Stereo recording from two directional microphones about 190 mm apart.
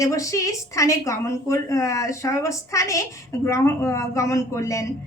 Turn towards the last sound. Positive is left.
turn(degrees=15)  # may be behind; listen again after turning